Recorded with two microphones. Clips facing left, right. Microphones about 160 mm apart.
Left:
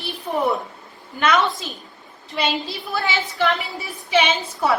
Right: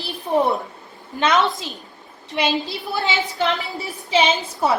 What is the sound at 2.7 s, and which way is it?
Speech, 25° right (ahead or behind).